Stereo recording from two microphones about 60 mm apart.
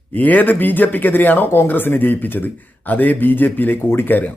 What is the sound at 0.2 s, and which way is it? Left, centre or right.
Speech, left.